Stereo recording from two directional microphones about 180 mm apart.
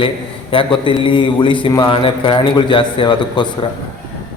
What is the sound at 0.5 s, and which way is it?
A man's voice, 30° left (ahead or behind).